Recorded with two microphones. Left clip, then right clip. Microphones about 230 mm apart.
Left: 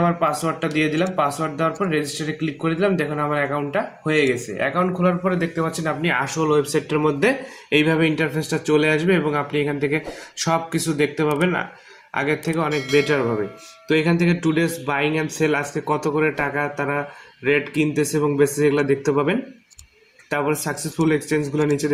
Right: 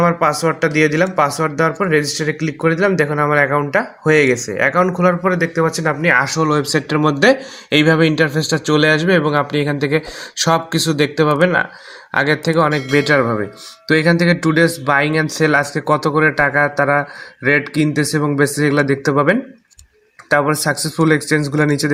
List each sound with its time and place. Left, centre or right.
0.0 s speech: right
12.7 s speech: centre
13.1 s speech: right